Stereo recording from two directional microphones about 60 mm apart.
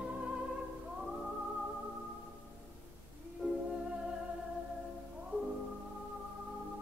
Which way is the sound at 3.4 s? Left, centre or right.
Centre.